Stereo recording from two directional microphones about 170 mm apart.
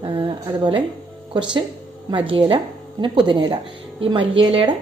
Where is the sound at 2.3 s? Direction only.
30° right (ahead or behind).